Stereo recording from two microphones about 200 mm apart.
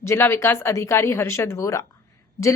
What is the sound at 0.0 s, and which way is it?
Speech, 15° left (ahead or behind).